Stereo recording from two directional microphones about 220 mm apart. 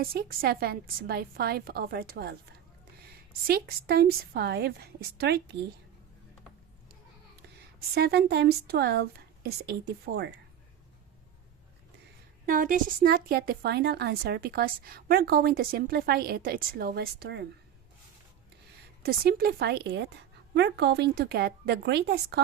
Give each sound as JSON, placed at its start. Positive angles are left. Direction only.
{"t": 0.0, "sound": "speech", "side_deg": -45}
{"t": 3.4, "sound": "speech", "side_deg": -45}
{"t": 7.9, "sound": "speech", "side_deg": -45}
{"t": 12.5, "sound": "speech", "side_deg": -40}
{"t": 19.0, "sound": "speech", "side_deg": -45}